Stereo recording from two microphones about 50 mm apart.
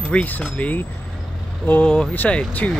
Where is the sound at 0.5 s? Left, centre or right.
Left.